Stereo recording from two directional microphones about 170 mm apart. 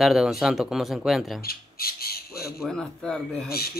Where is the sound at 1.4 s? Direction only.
60° left (ahead or behind).